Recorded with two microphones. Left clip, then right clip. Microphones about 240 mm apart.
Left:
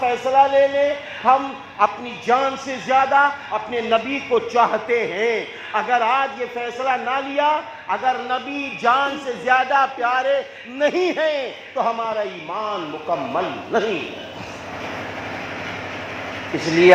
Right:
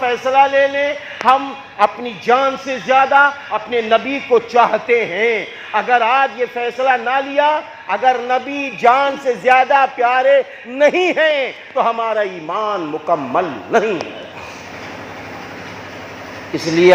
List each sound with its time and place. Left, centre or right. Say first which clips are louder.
0.0 s a man's voice: right 3 dB; right